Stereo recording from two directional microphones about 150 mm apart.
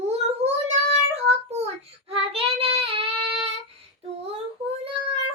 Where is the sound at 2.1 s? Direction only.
40° right (ahead or behind).